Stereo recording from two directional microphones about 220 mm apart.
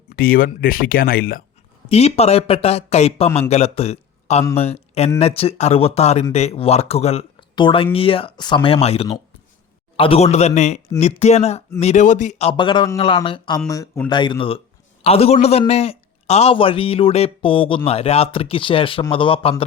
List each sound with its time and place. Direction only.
0.1 s speech: 40° left (ahead or behind)
1.9 s a man's voice: 30° left (ahead or behind)